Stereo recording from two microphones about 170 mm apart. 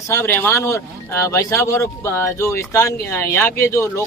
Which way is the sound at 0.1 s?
15° left (ahead or behind).